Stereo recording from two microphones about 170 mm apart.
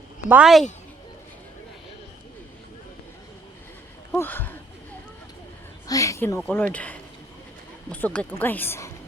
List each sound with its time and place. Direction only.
0.3 s speech: 5° right (ahead or behind)
4.1 s speech: 10° left (ahead or behind)
5.9 s speech: 20° left (ahead or behind)